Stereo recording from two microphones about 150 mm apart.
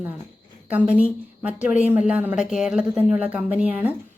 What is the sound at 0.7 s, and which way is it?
A woman's voice, 10° right (ahead or behind).